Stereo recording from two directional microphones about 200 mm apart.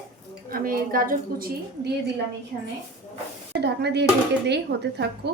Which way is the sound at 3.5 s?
55° right (ahead or behind).